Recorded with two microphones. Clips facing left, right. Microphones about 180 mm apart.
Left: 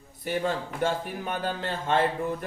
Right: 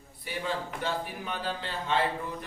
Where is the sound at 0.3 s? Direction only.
50° left (ahead or behind).